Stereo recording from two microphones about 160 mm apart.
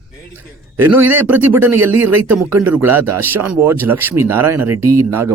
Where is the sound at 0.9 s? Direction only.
10° right (ahead or behind).